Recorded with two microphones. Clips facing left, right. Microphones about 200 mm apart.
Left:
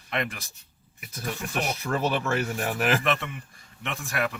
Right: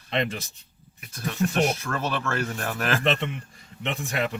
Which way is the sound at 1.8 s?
15° left (ahead or behind).